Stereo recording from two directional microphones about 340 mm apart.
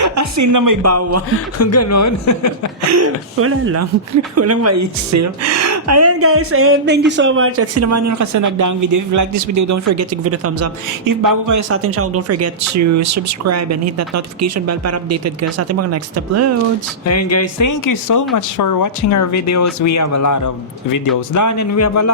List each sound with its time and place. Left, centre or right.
0.0 s speech: right
0.8 s speech: right
1.3 s speech: left
2.8 s speech: right
11.0 s speech: right
11.7 s speech: right
17.1 s speech: left